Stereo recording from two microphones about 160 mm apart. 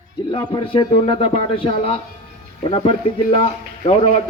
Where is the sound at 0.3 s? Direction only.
35° left (ahead or behind).